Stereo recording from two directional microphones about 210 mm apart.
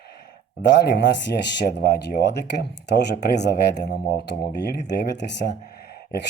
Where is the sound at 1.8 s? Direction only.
55° left (ahead or behind).